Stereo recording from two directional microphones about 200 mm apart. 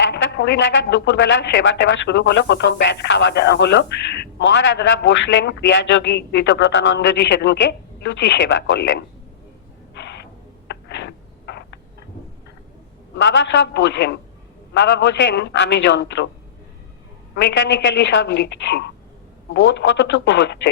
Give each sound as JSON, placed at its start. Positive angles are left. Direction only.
{"t": 0.0, "sound": "speech", "side_deg": 60}
{"t": 9.9, "sound": "a sound", "side_deg": 60}
{"t": 13.1, "sound": "speech", "side_deg": 65}
{"t": 17.3, "sound": "speech", "side_deg": 65}